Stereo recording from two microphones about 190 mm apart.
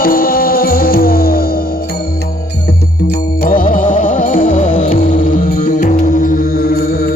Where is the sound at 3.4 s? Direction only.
45° left (ahead or behind).